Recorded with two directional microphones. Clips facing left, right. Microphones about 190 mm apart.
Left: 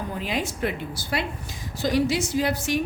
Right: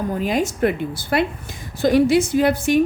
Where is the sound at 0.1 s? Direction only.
45° right (ahead or behind).